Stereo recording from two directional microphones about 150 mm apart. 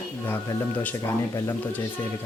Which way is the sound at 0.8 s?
15° left (ahead or behind).